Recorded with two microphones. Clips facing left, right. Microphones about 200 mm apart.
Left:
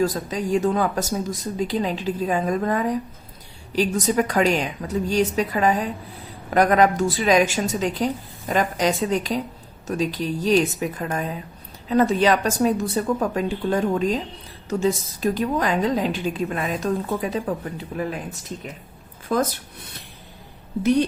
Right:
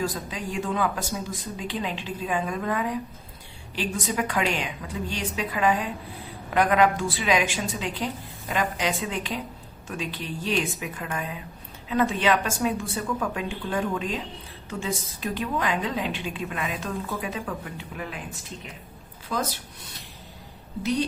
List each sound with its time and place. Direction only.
0.0 s a woman's voice: 40° left (ahead or behind)
19.3 s speech: 50° left (ahead or behind)